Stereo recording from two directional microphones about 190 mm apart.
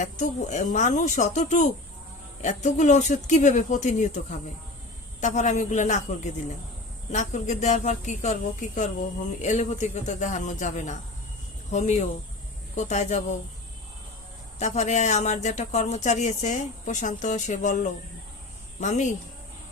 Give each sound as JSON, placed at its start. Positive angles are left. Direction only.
{"t": 0.0, "sound": "a woman's voice", "side_deg": 40}
{"t": 14.6, "sound": "a woman's voice", "side_deg": 35}
{"t": 18.8, "sound": "a woman's voice", "side_deg": 40}